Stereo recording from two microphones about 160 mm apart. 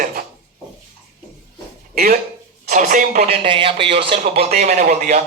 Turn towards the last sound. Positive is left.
turn(degrees=-50)  # may be behind; listen again after turning